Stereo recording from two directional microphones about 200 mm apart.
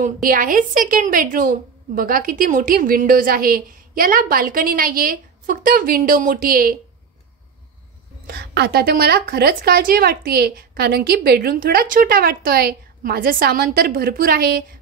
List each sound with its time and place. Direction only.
0.0 s a woman's voice: 45° right (ahead or behind)
8.3 s a woman's voice: 55° right (ahead or behind)